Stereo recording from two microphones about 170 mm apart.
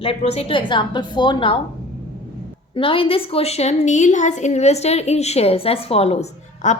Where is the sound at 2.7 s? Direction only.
30° left (ahead or behind).